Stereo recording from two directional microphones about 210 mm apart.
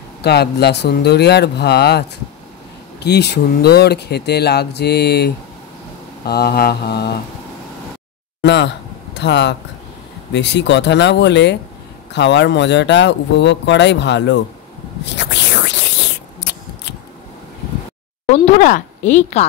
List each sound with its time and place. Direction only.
0.2 s speech: 50° left (ahead or behind)
8.4 s speech: 55° left (ahead or behind)
15.0 s a sound: 55° left (ahead or behind)
18.3 s speech: 35° left (ahead or behind)